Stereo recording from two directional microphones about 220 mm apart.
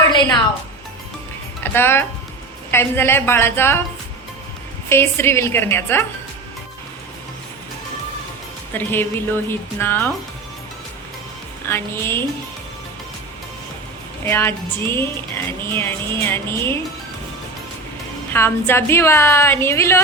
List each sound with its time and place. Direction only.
1.6 s speech: 10° left (ahead or behind)
4.9 s speech: 10° left (ahead or behind)
8.7 s speech: 10° left (ahead or behind)
11.7 s speech: 10° left (ahead or behind)
14.3 s speech: 10° left (ahead or behind)
18.3 s speech: 10° left (ahead or behind)